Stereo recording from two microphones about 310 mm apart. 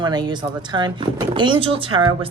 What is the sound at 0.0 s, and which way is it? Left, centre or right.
Speech, centre.